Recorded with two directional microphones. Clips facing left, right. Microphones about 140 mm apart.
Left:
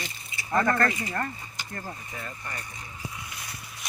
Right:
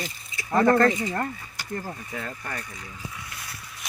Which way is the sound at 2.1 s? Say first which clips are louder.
Right 4 dB; 65° right (ahead or behind).